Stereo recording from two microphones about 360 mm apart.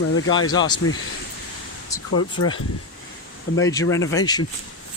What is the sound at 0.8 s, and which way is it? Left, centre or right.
Speech, left.